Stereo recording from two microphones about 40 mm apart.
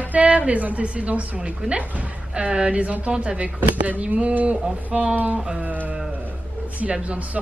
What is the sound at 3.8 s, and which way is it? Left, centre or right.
A woman's voice, right.